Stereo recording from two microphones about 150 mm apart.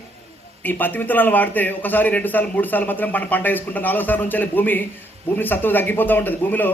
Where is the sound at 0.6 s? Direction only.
10° left (ahead or behind).